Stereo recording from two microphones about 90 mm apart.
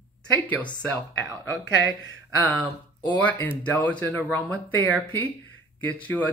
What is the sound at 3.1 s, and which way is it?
Speech, 15° left (ahead or behind).